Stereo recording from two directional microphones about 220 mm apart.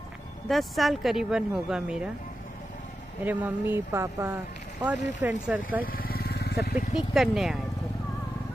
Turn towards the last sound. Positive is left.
turn(degrees=0)  # may be behind; listen again after turning